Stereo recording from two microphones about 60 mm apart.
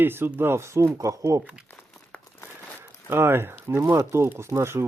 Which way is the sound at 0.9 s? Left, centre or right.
Right.